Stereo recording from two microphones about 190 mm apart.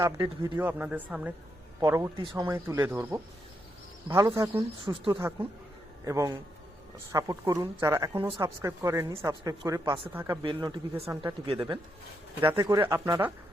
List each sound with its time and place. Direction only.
0.0 s a man's voice: 15° right (ahead or behind)
4.9 s a man's voice: 25° right (ahead or behind)
6.1 s speech: 15° right (ahead or behind)
10.4 s a man's voice: 25° right (ahead or behind)
11.1 s speech: 15° right (ahead or behind)
11.4 s a man's voice: 30° right (ahead or behind)
12.5 s speech: 15° right (ahead or behind)